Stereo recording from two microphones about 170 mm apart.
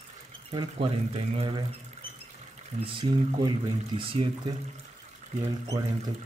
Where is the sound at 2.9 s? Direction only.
30° right (ahead or behind).